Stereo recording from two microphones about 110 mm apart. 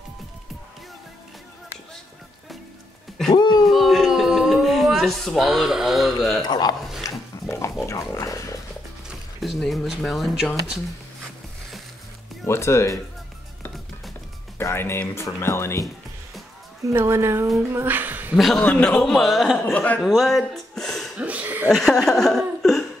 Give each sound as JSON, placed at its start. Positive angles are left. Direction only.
{"t": 3.3, "sound": "a sound", "side_deg": 45}
{"t": 3.6, "sound": "a sound", "side_deg": 0}
{"t": 6.4, "sound": "speech", "side_deg": 40}
{"t": 7.0, "sound": "a sound", "side_deg": 25}
{"t": 7.8, "sound": "pig", "side_deg": 30}
{"t": 9.4, "sound": "a man's voice", "side_deg": 0}
{"t": 12.4, "sound": "pig", "side_deg": 25}
{"t": 14.6, "sound": "pig", "side_deg": 20}
{"t": 16.9, "sound": "a woman's voice", "side_deg": -25}
{"t": 18.3, "sound": "a man's voice", "side_deg": 5}
{"t": 19.6, "sound": "speech", "side_deg": 15}
{"t": 20.0, "sound": "a sound", "side_deg": 0}
{"t": 21.2, "sound": "chuckle", "side_deg": -15}
{"t": 21.6, "sound": "chuckle", "side_deg": 5}